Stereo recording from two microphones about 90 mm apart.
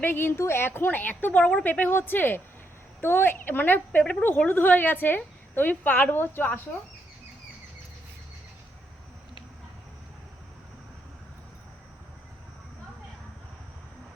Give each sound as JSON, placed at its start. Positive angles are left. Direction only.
{"t": 0.0, "sound": "a woman's voice", "side_deg": 25}